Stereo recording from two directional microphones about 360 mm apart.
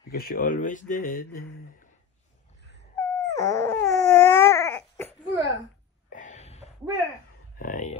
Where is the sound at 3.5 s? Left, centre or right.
Centre.